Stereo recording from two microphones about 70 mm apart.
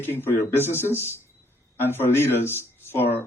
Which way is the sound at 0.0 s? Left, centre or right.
Left.